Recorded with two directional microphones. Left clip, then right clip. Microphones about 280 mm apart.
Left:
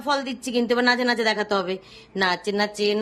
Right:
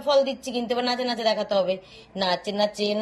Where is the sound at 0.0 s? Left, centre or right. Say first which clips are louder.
Right 4 dB; centre.